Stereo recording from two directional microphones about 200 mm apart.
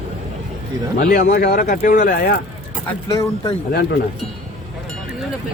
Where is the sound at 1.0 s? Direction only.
45° left (ahead or behind).